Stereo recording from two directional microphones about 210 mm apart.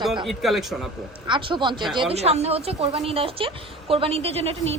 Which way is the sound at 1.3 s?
25° right (ahead or behind).